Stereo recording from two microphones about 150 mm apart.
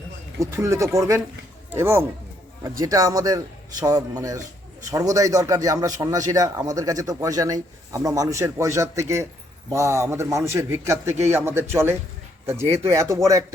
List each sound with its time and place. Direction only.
0.3 s speech: 20° right (ahead or behind)